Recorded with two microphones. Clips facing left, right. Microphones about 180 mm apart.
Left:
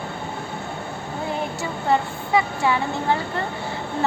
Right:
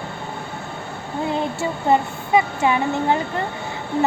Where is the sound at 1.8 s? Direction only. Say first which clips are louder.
Right 2 dB; 20° right (ahead or behind).